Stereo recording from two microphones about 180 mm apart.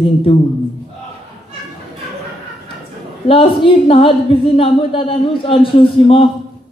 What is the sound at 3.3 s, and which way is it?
A woman's voice, 30° left (ahead or behind).